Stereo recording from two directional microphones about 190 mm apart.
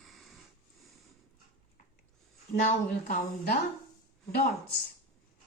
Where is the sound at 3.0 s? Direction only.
50° left (ahead or behind).